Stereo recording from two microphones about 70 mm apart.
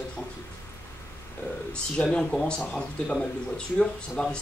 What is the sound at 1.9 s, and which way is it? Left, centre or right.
Speech, centre.